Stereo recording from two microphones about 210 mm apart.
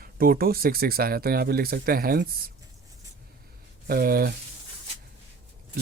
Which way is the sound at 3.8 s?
45° right (ahead or behind).